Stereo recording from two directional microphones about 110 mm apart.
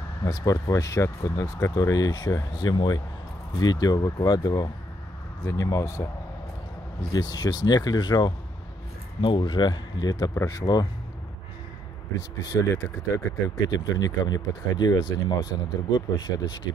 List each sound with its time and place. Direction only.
0.2 s speech: 35° left (ahead or behind)
7.1 s speech: 35° left (ahead or behind)
10.6 s speech: 35° left (ahead or behind)
12.2 s speech: 35° left (ahead or behind)